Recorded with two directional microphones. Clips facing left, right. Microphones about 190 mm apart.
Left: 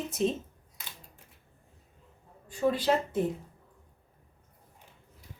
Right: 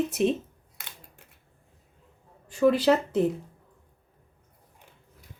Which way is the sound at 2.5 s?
80° right.